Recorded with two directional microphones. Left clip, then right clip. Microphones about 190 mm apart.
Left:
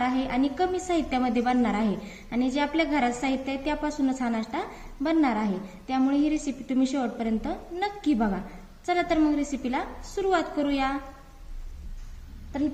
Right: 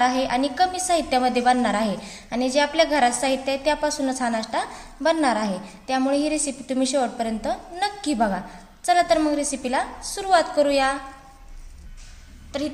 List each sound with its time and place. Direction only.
0.0 s a woman's voice: 45° right (ahead or behind)